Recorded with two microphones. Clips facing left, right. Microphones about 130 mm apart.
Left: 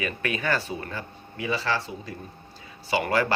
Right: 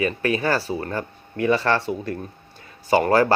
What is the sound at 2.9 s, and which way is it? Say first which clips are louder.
Speech: right 7 dB; 40° right (ahead or behind).